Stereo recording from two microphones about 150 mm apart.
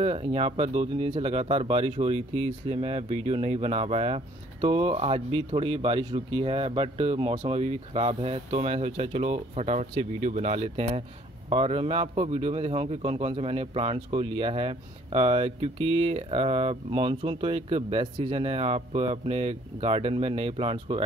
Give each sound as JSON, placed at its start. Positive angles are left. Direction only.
{"t": 0.0, "sound": "speech", "side_deg": -40}